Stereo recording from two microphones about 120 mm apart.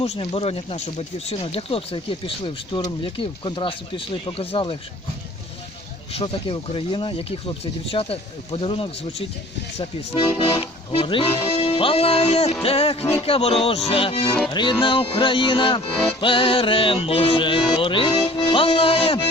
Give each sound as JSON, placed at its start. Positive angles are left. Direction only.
{"t": 0.0, "sound": "speech", "side_deg": 60}
{"t": 6.1, "sound": "speech", "side_deg": 50}
{"t": 9.7, "sound": "speech", "side_deg": 60}
{"t": 10.6, "sound": "speech", "side_deg": 50}